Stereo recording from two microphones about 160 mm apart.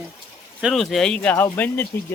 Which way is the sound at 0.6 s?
Centre (ahead or behind).